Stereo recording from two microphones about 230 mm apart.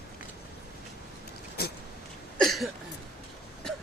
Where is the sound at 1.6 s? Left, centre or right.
Left.